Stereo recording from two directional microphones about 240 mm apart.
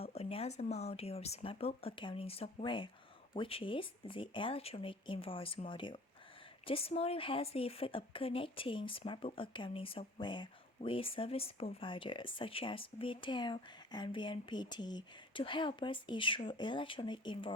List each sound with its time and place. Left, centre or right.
0.0 s a woman's voice: left